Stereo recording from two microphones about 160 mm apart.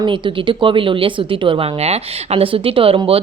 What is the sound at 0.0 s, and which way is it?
Speech, 30° right (ahead or behind).